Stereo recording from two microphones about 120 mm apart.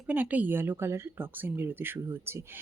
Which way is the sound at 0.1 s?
15° right (ahead or behind).